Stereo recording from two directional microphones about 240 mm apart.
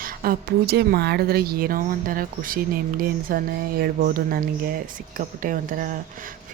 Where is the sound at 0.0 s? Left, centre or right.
Right.